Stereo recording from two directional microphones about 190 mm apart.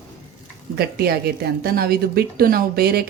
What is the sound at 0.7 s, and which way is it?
A woman's voice, 55° right (ahead or behind).